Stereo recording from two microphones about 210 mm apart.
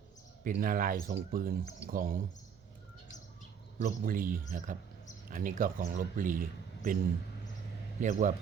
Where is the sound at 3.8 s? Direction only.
40° right (ahead or behind).